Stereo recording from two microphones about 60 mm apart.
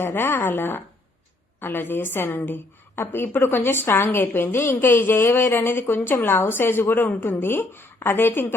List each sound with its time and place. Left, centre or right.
0.0 s a woman's voice: left